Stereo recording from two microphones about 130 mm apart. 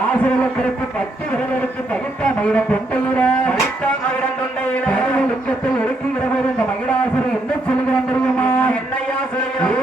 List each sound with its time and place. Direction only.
2.2 s speech: 10° left (ahead or behind)
4.9 s speech: 10° left (ahead or behind)
9.6 s a sound: 10° left (ahead or behind)